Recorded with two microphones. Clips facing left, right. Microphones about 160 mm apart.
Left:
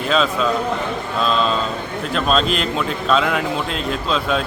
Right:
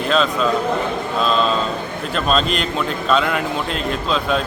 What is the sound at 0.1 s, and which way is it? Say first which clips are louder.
Speech: even; centre (ahead or behind).